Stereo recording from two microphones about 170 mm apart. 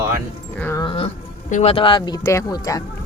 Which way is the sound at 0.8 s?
30° left (ahead or behind).